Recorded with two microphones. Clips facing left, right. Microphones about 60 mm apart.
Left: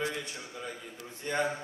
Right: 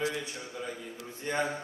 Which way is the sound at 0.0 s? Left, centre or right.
Centre.